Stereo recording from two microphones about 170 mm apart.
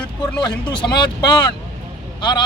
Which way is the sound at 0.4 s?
30° left (ahead or behind).